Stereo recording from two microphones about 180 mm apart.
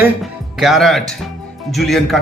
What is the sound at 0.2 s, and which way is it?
Speech, centre (ahead or behind).